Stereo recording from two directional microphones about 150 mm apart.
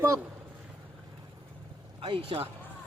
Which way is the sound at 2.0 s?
35° right (ahead or behind).